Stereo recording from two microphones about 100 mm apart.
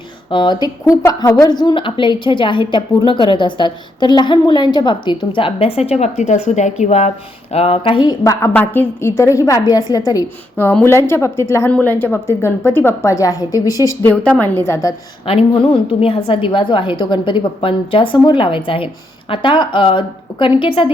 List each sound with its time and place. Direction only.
0.3 s a woman's voice: 50° left (ahead or behind); by 7.0 s 90° left
7.5 s speech: 80° left; by 8.1 s 55° left (ahead or behind)
8.2 s a woman's voice: 30° left (ahead or behind)
10.8 s a woman's voice: 25° left (ahead or behind)
14.0 s a woman's voice: 15° left (ahead or behind)
15.3 s a woman's voice: 65° left (ahead or behind)
16.0 s a woman's voice: 80° left; by 20.9 s 60° left (ahead or behind)